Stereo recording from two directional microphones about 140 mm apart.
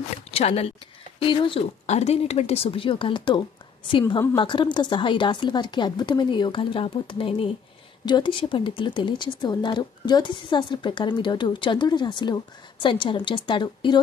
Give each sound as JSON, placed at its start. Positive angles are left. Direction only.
{"t": 0.3, "sound": "speech", "side_deg": 45}
{"t": 1.2, "sound": "speech", "side_deg": 35}
{"t": 1.9, "sound": "speech", "side_deg": 50}